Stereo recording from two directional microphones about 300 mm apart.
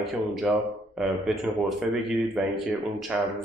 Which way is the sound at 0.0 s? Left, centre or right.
Centre.